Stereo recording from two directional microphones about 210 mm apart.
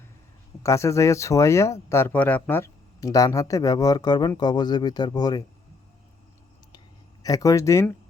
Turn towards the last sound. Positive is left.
turn(degrees=15)  # may be behind; listen again after turning